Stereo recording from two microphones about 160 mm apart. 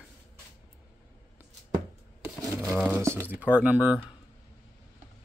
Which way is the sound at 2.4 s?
20° right (ahead or behind).